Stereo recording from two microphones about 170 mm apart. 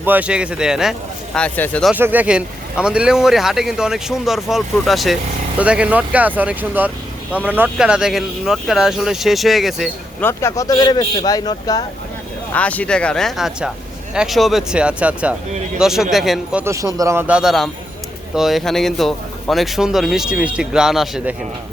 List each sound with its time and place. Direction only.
0.0 s speech: 10° right (ahead or behind); by 1.9 s 10° left (ahead or behind)
1.9 s speech: 10° right (ahead or behind)
10.2 s a man's voice: 15° left (ahead or behind)
12.5 s speech: 10° left (ahead or behind)
16.6 s speech: 20° right (ahead or behind); by 21.3 s centre (ahead or behind)